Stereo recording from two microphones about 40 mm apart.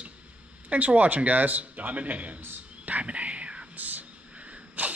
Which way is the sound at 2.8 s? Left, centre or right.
Right.